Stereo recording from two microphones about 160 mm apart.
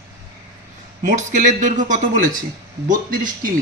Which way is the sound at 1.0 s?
50° right (ahead or behind).